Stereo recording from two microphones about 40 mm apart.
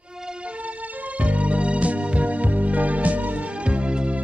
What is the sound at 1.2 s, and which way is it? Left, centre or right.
Music, right.